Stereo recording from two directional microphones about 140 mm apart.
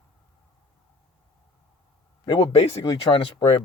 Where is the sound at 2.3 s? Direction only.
45° left (ahead or behind).